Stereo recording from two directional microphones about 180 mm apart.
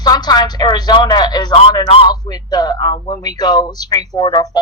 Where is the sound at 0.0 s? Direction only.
20° left (ahead or behind).